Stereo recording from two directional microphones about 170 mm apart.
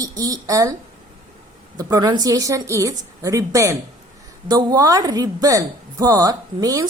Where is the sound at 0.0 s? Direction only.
20° right (ahead or behind).